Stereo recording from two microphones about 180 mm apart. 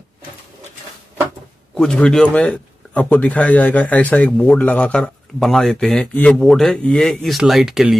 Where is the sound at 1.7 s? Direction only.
5° left (ahead or behind).